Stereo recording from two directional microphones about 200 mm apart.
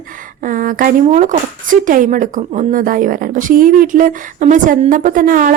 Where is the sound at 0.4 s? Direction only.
40° right (ahead or behind).